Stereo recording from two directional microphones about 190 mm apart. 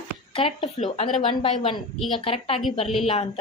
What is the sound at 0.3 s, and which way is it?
A woman's voice, 30° left (ahead or behind).